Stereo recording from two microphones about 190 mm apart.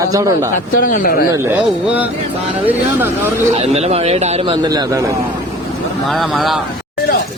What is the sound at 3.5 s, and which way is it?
Speech, 35° right (ahead or behind).